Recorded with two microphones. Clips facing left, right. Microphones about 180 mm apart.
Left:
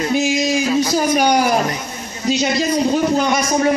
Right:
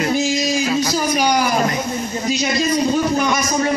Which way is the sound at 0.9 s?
50° left (ahead or behind).